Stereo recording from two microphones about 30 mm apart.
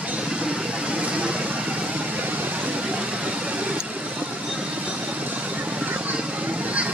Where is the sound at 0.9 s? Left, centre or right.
Right.